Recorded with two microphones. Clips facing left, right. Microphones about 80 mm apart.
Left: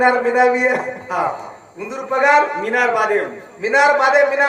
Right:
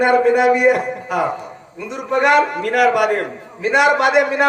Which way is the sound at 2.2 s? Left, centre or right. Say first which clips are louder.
Left 1 dB; right.